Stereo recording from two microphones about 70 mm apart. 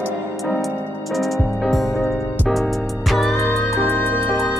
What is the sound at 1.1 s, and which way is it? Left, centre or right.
Music, centre.